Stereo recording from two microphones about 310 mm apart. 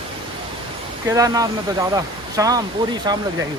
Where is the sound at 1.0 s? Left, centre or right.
Centre.